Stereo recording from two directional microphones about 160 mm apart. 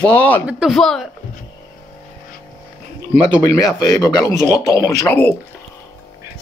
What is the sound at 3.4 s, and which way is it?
Speech, 20° left (ahead or behind).